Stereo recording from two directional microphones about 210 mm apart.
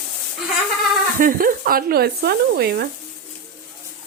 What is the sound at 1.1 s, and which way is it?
Speech, 40° right (ahead or behind).